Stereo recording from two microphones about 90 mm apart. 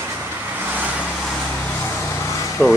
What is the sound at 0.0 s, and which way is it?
Vehicle, 20° right (ahead or behind).